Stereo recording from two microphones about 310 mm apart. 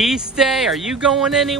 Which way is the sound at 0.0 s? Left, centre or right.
Centre.